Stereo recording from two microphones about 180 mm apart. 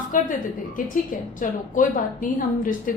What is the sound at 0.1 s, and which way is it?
Speech, 45° left (ahead or behind).